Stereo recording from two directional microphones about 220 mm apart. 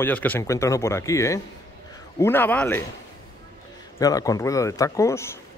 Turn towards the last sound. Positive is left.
turn(degrees=10)  # may be behind; listen again after turning